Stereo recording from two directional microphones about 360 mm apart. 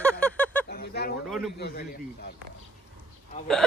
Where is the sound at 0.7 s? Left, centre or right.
Left.